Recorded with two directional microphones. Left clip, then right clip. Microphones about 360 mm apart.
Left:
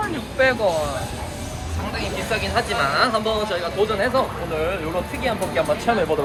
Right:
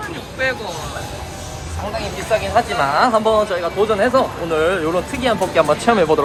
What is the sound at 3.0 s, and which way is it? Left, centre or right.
Speech, centre.